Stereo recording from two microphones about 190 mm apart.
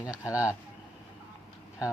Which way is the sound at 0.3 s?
15° left (ahead or behind).